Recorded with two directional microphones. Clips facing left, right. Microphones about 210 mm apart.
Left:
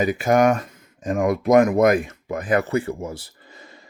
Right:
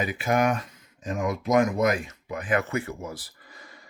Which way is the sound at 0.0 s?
45° left (ahead or behind).